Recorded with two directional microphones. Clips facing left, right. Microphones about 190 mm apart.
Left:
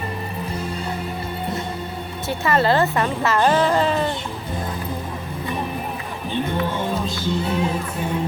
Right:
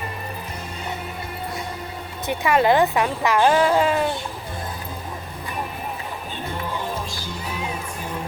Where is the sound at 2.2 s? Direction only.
15° right (ahead or behind).